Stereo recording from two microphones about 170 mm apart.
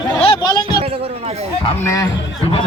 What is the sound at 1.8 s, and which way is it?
Speech, 20° left (ahead or behind).